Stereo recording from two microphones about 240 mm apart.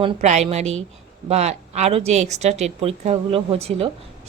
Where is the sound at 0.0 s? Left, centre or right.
Right.